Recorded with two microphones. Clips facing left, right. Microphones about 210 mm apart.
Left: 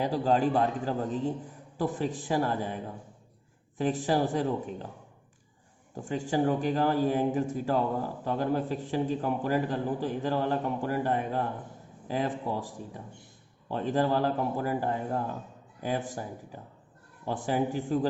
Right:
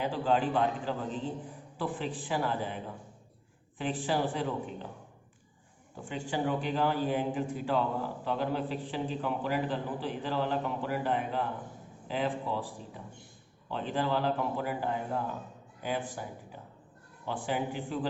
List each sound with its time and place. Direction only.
0.0 s a man's voice: 40° left (ahead or behind)
5.9 s a man's voice: 40° left (ahead or behind)
17.2 s a man's voice: 45° left (ahead or behind)